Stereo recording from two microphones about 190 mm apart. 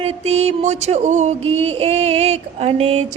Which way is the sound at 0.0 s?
30° right (ahead or behind).